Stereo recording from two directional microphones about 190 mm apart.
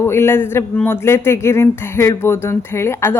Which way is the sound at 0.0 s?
15° left (ahead or behind).